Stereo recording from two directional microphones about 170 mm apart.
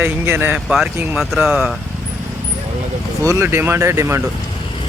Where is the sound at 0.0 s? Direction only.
10° right (ahead or behind).